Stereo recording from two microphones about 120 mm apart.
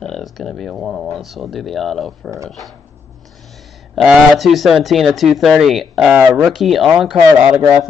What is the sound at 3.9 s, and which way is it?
Speech, centre (ahead or behind).